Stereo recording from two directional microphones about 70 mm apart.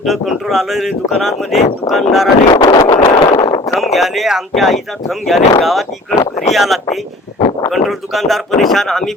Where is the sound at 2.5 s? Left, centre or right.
Left.